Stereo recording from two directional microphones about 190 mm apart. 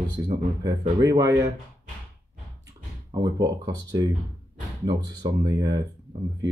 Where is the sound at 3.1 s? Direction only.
20° right (ahead or behind).